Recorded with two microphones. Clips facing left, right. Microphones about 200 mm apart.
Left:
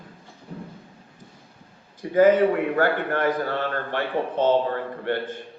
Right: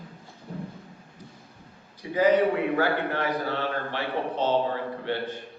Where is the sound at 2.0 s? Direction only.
50° left (ahead or behind).